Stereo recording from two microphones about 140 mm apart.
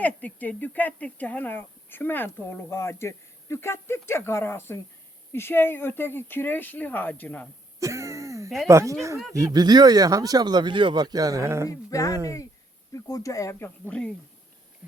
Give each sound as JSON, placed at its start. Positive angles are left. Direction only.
{"t": 0.0, "sound": "speech", "side_deg": 10}
{"t": 7.8, "sound": "throat clearing", "side_deg": -20}
{"t": 8.6, "sound": "speech", "side_deg": -20}
{"t": 11.7, "sound": "speech", "side_deg": 25}